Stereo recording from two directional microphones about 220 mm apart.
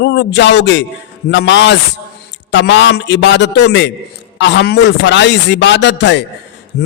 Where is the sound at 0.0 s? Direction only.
50° left (ahead or behind).